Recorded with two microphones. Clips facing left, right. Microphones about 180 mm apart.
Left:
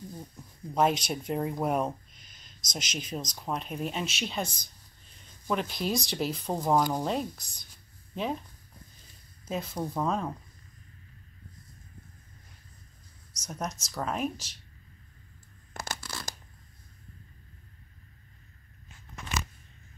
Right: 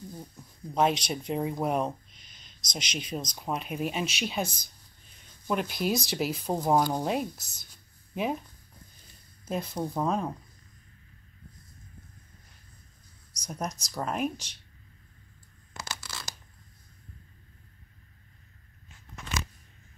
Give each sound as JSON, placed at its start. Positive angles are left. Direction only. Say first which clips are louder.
{"t": 0.7, "sound": "speech", "louder": "even", "side_deg": 5}
{"t": 9.5, "sound": "speech", "louder": "right 1 dB", "side_deg": 0}
{"t": 13.4, "sound": "speech", "louder": "right 1 dB", "side_deg": 0}
{"t": 15.7, "sound": "tearing", "louder": "left 2 dB", "side_deg": 55}